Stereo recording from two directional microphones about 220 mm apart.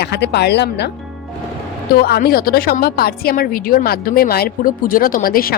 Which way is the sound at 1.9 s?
45° left (ahead or behind).